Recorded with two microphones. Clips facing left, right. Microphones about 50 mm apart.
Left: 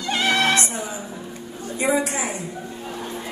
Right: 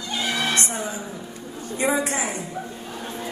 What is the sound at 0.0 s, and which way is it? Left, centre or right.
Music, left.